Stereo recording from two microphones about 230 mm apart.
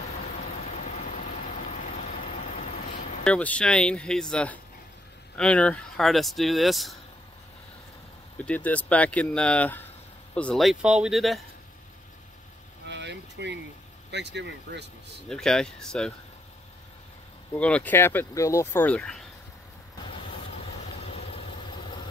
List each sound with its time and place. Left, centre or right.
0.8 s vehicle: left
3.3 s speech: centre
8.5 s speech: centre
12.8 s vehicle: right
14.1 s speech: right
15.2 s speech: centre
17.6 s speech: centre
21.0 s vehicle: left